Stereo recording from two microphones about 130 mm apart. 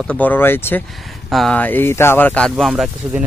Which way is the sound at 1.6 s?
15° left (ahead or behind).